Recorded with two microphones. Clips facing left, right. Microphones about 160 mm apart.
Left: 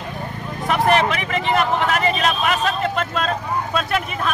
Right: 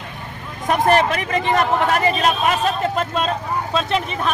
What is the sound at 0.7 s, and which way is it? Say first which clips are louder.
A man's voice: right 1 dB; 45° right (ahead or behind).